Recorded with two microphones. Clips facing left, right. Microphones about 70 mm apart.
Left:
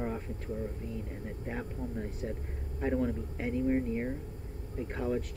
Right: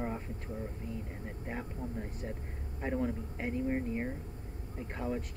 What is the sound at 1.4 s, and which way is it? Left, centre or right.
Speech, centre.